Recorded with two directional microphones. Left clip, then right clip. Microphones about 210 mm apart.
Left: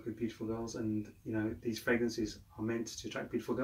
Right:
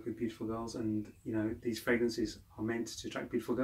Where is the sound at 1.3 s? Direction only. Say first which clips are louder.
Right 1 dB; 10° right (ahead or behind).